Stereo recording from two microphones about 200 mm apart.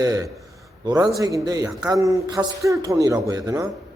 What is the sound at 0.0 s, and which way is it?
Speech, 20° right (ahead or behind).